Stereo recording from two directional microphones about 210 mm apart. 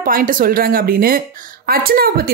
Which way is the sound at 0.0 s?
40° right (ahead or behind).